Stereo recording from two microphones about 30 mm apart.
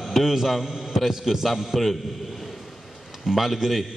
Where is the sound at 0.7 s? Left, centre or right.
Centre.